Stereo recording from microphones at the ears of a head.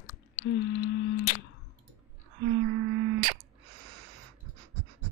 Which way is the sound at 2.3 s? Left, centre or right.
Right.